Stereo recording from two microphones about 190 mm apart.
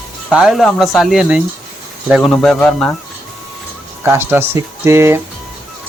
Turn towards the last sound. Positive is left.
turn(degrees=-15)  # may be behind; listen again after turning